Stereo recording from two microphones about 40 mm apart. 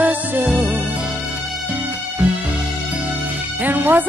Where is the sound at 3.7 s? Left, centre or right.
Right.